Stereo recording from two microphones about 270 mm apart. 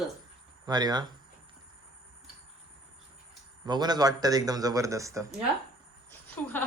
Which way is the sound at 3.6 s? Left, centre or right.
Centre.